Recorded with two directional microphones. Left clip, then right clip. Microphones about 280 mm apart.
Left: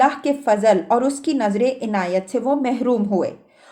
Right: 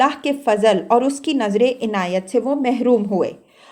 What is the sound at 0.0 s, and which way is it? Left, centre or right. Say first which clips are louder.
A woman's voice: even; centre.